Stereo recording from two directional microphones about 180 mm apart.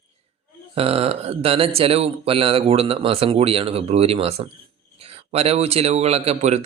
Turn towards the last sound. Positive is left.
turn(degrees=-40)  # may be behind; listen again after turning